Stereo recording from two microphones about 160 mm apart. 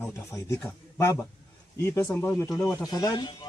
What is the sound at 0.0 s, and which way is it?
Speech, 20° left (ahead or behind).